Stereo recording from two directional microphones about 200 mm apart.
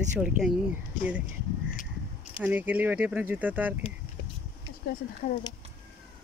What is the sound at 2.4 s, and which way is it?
Speech, 10° right (ahead or behind).